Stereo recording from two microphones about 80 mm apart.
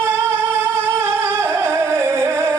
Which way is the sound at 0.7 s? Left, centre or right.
Right.